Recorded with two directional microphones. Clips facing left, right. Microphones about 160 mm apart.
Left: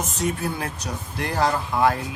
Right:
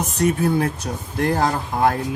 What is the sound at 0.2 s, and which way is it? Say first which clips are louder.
A man's voice: right 8 dB; 55° right (ahead or behind).